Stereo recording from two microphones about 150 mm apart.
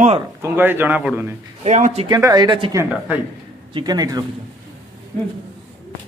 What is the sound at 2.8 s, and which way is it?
Speech, 10° right (ahead or behind).